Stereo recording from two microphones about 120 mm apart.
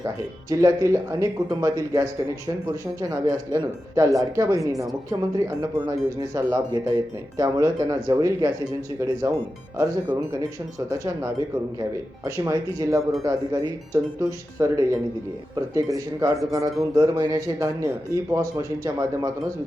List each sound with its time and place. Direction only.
0.5 s speech: 25° right (ahead or behind)
9.7 s speech: 25° right (ahead or behind)